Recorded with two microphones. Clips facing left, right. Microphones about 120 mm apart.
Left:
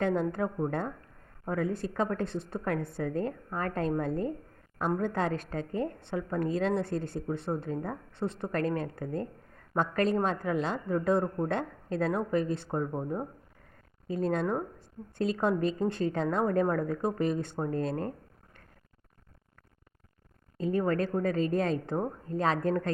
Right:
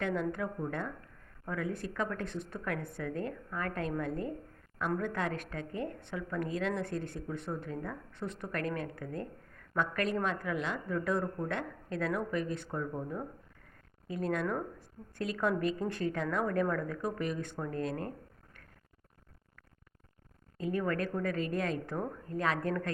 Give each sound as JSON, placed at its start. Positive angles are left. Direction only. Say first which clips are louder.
{"t": 0.0, "sound": "a woman's voice", "louder": "left 5 dB", "side_deg": 35}
{"t": 20.6, "sound": "speech", "louder": "left 5 dB", "side_deg": 30}